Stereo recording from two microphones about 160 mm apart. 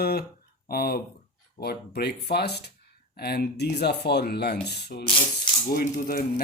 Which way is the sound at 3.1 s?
75° left (ahead or behind).